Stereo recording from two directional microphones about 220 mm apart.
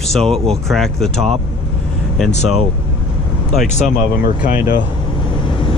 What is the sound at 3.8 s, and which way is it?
Speech, 35° left (ahead or behind).